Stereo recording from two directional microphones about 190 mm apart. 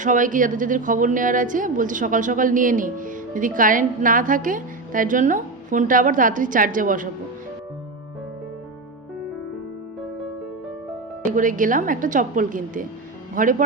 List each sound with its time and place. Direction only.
0.0 s a woman's voice: 45° right (ahead or behind)
11.3 s a woman's voice: 45° right (ahead or behind)